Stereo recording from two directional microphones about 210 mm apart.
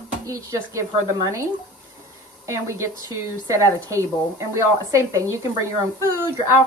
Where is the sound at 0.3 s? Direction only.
15° right (ahead or behind).